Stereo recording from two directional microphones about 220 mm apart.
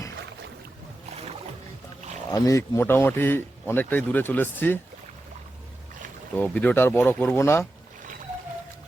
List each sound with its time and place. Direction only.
1.1 s boat: 30° right (ahead or behind)
2.3 s speech: 15° left (ahead or behind)
6.3 s speech: 5° left (ahead or behind)